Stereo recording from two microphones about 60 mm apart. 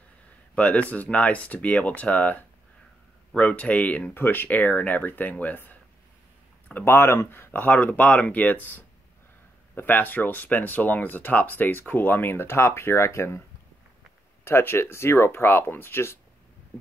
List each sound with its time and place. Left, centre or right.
0.6 s speech: left
4.1 s speech: left
6.7 s speech: left
14.4 s speech: left